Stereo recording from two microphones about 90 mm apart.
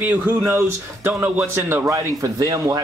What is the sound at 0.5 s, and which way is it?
Speech, 30° right (ahead or behind).